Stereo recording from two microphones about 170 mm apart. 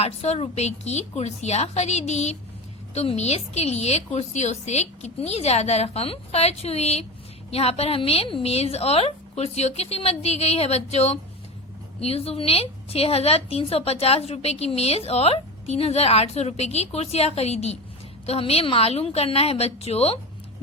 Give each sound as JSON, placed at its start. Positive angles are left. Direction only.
{"t": 0.0, "sound": "a woman's voice", "side_deg": 40}